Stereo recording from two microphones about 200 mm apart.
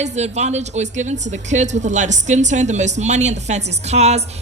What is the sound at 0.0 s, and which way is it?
A woman's voice, 35° right (ahead or behind).